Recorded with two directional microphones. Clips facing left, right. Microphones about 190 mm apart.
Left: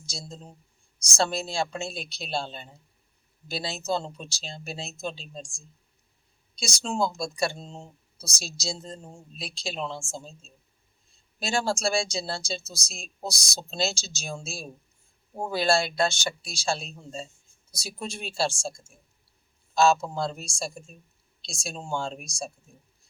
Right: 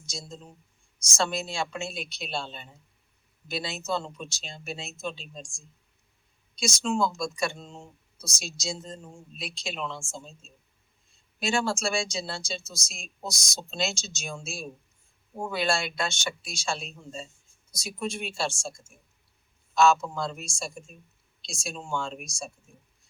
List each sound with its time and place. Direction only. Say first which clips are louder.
0.0 s speech: even; 35° left (ahead or behind)